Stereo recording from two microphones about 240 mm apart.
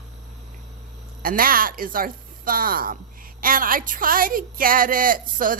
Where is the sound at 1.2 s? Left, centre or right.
Right.